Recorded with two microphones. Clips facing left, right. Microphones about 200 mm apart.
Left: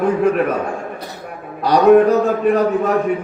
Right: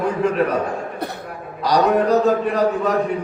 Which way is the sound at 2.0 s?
40° right (ahead or behind).